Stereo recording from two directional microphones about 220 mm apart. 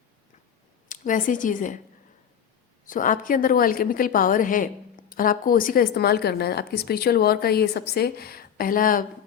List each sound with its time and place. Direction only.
0.9 s speech: 35° left (ahead or behind)
2.8 s a woman's voice: 35° left (ahead or behind)